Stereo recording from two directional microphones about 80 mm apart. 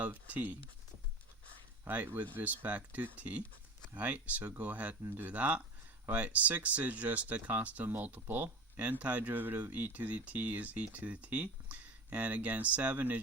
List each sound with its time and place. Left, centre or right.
0.0 s speech: right
1.8 s speech: right